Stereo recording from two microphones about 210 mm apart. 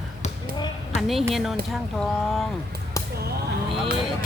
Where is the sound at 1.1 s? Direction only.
Centre (ahead or behind).